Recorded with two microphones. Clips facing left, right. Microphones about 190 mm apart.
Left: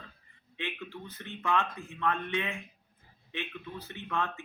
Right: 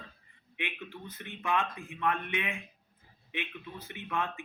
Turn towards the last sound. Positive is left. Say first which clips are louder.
# left 1 dB
turn(degrees=-15)  # may be behind; listen again after turning